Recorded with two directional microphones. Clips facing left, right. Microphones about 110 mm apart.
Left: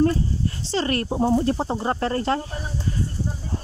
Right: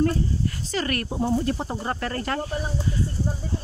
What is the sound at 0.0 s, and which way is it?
Speech, 30° left (ahead or behind).